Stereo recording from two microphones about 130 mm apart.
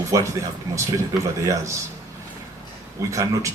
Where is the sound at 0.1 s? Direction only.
25° right (ahead or behind).